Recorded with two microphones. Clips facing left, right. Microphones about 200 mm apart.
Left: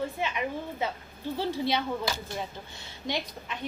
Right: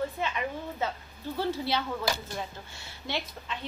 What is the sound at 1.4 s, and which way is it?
Speech, 15° left (ahead or behind).